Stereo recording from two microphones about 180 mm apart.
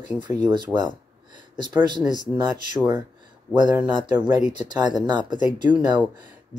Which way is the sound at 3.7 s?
10° right (ahead or behind).